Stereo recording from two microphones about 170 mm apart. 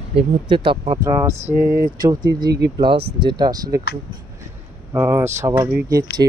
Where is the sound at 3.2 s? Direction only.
25° right (ahead or behind).